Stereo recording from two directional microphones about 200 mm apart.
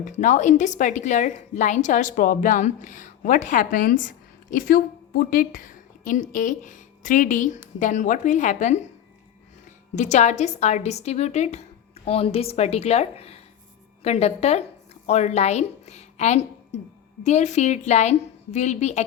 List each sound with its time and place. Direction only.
0.0 s a woman's voice: 40° left (ahead or behind)
9.9 s a woman's voice: 35° left (ahead or behind)